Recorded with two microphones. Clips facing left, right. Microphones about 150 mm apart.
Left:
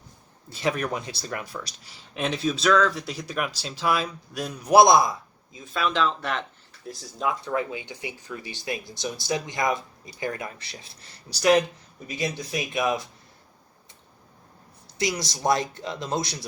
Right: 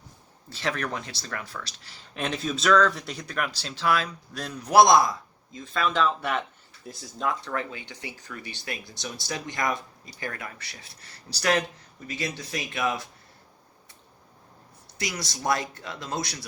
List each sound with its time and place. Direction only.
0.6 s speech: 10° left (ahead or behind)
2.1 s speech: centre (ahead or behind)
5.5 s speech: 5° left (ahead or behind)
14.9 s speech: 20° left (ahead or behind)